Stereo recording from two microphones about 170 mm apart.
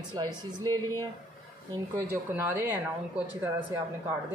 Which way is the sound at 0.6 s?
15° left (ahead or behind).